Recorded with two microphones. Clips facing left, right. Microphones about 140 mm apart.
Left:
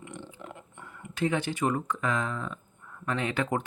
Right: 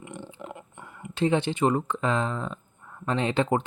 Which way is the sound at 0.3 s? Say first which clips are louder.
Right 4 dB; 20° right (ahead or behind).